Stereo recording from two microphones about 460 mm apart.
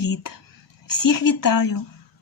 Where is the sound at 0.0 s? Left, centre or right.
Left.